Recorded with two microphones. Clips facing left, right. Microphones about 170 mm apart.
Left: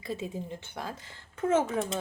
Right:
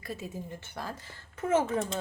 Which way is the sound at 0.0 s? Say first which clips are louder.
Left 3 dB; 25° left (ahead or behind).